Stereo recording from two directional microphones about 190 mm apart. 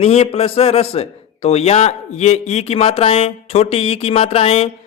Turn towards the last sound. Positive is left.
turn(degrees=30)  # may be behind; listen again after turning